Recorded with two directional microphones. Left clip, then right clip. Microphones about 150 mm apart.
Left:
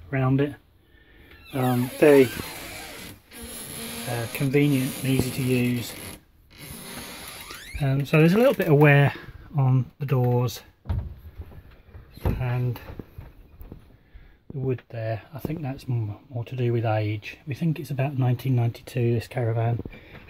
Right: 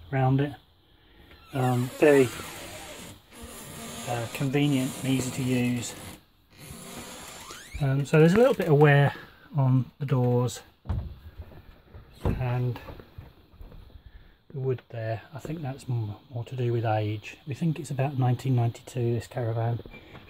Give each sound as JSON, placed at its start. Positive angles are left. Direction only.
{"t": 0.1, "sound": "speech", "side_deg": 0}
{"t": 1.5, "sound": "speech", "side_deg": 10}
{"t": 4.1, "sound": "speech", "side_deg": 0}
{"t": 7.4, "sound": "speech", "side_deg": 5}
{"t": 12.4, "sound": "speech", "side_deg": 0}
{"t": 14.7, "sound": "speech", "side_deg": 10}
{"t": 18.9, "sound": "speech", "side_deg": 20}